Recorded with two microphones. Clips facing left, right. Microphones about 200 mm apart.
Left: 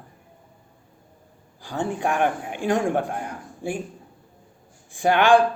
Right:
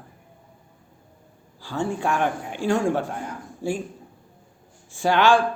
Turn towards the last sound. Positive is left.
turn(degrees=15)  # may be behind; listen again after turning